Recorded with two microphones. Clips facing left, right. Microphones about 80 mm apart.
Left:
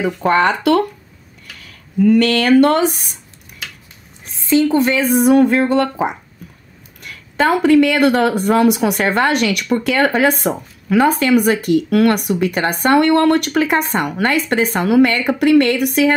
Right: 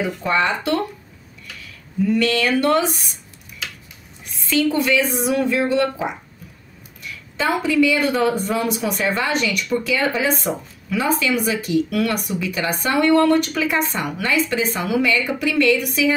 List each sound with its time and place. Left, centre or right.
0.0 s speech: left
4.3 s a woman's voice: left